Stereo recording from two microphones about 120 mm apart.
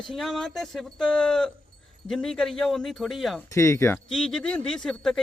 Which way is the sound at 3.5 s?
25° left (ahead or behind).